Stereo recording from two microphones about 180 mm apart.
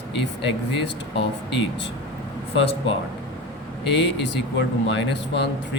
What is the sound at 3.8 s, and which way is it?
Speech, 75° left (ahead or behind).